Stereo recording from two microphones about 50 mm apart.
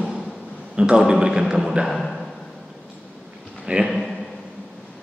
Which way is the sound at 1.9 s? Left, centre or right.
Centre.